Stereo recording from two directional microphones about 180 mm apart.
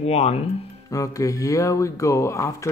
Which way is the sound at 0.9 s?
20° left (ahead or behind).